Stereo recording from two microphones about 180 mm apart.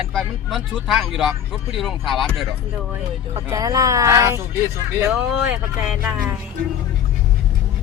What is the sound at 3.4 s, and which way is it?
Speech, 20° right (ahead or behind).